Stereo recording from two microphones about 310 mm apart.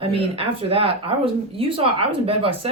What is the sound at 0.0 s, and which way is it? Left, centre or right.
Speech, centre.